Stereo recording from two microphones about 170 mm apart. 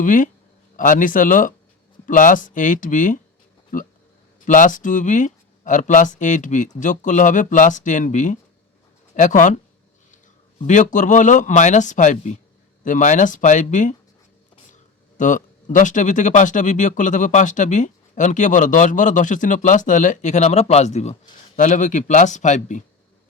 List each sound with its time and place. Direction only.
0.0 s speech: 50° left (ahead or behind)
10.7 s speech: 45° left (ahead or behind)
15.2 s speech: 50° left (ahead or behind)